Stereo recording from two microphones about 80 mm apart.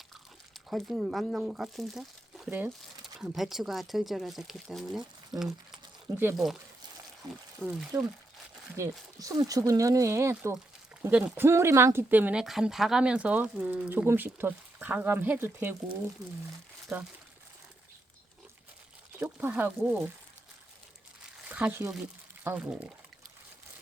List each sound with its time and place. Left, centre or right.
0.7 s speech: centre
2.5 s speech: right
3.3 s speech: centre
7.6 s speech: centre
8.7 s speech: right
12.1 s speech: right
12.4 s speech: centre
14.1 s speech: right
16.9 s speech: right
19.2 s speech: right
21.4 s crumpling: centre
22.5 s speech: centre